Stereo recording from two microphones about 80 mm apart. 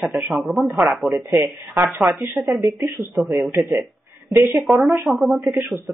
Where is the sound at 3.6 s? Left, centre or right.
Right.